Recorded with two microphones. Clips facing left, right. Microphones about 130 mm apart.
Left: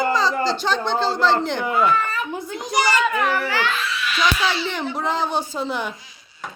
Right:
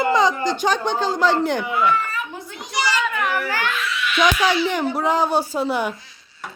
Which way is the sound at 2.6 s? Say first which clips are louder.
Left 3 dB; 45° left (ahead or behind).